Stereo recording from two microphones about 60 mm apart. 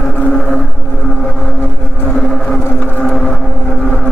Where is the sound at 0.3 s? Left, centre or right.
Centre.